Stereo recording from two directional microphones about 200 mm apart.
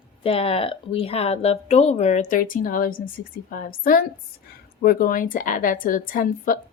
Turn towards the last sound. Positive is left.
turn(degrees=45)  # may be behind; listen again after turning